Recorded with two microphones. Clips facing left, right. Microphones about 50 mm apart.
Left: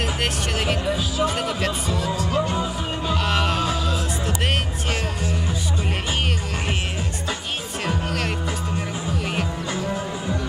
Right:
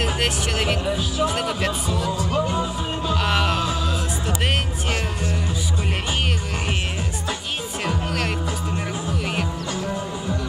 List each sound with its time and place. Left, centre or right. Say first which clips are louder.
0.0 s speech: right 1 dB; centre
2.1 s music: left 1 dB; centre
2.5 s music: right 1 dB; left
3.2 s music: right 1 dB; centre
7.8 s music: even; centre